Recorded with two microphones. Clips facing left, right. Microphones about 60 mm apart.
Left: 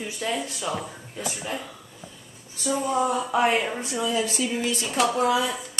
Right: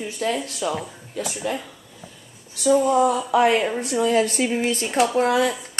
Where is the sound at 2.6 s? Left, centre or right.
Right.